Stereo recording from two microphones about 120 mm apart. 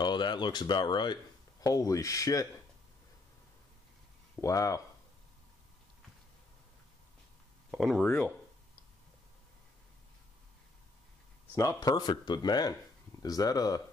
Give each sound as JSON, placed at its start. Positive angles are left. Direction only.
{"t": 0.0, "sound": "speech", "side_deg": 40}
{"t": 4.4, "sound": "speech", "side_deg": 25}
{"t": 7.7, "sound": "speech", "side_deg": 0}
{"t": 11.5, "sound": "speech", "side_deg": 30}